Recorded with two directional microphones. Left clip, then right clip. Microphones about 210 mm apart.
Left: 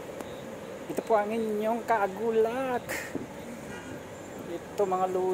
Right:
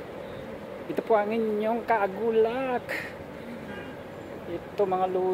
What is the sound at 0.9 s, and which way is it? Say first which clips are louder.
Speech: right 2 dB; 5° right (ahead or behind).